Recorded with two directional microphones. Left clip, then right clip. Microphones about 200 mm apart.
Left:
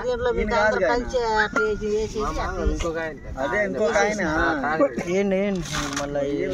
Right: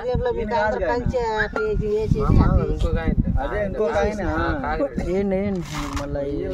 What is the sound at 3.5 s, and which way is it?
Speech, 45° right (ahead or behind).